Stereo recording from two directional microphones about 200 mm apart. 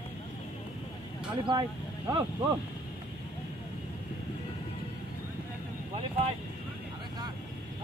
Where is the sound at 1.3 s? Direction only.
20° right (ahead or behind).